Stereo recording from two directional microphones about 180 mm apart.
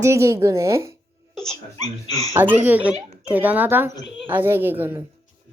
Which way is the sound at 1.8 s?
35° right (ahead or behind).